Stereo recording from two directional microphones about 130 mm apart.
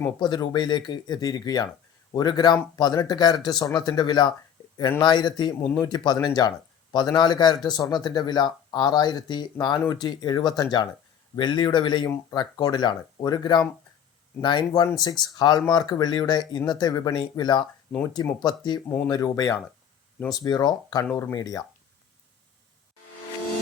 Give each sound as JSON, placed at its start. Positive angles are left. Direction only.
{"t": 0.2, "sound": "speech", "side_deg": 35}
{"t": 18.9, "sound": "speech", "side_deg": 10}
{"t": 19.1, "sound": "speech", "side_deg": 25}